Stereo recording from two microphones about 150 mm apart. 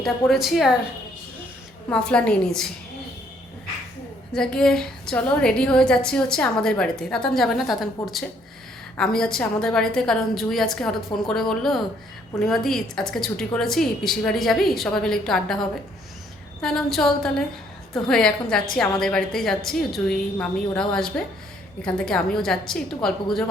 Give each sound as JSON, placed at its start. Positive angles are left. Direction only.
{"t": 0.0, "sound": "a woman's voice", "side_deg": 0}
{"t": 1.9, "sound": "a woman's voice", "side_deg": 5}
{"t": 4.3, "sound": "a woman's voice", "side_deg": 5}
{"t": 16.6, "sound": "a woman's voice", "side_deg": 5}